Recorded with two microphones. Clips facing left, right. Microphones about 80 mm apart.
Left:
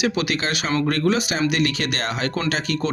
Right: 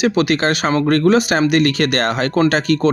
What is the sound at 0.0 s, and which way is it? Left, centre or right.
A man's voice, right.